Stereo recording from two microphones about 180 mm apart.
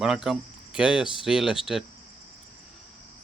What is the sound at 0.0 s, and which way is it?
Speech, centre (ahead or behind).